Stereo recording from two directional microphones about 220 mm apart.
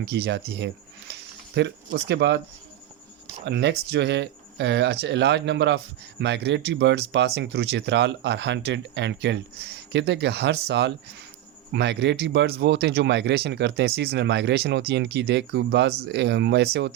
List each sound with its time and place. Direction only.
0.0 s speech: 50° right (ahead or behind)
3.4 s speech: 50° right (ahead or behind)